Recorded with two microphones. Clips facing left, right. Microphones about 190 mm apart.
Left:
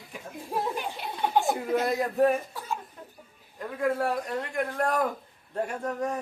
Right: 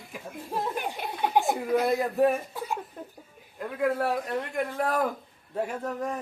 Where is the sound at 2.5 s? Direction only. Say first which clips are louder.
Right 2 dB; 15° right (ahead or behind).